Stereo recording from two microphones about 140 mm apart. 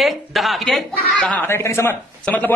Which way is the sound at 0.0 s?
Centre (ahead or behind).